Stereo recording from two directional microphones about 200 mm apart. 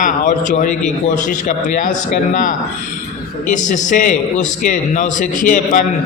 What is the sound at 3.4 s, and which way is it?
A man's voice, 40° left (ahead or behind).